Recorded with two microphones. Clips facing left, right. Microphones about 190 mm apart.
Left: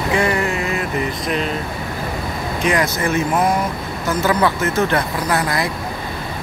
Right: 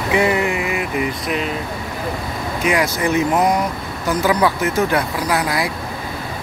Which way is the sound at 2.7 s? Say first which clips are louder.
Right 1 dB; 10° right (ahead or behind).